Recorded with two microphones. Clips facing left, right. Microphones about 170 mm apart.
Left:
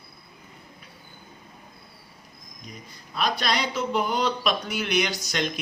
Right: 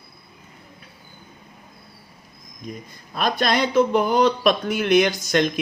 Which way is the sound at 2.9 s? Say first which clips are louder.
Right 3 dB; 50° right (ahead or behind).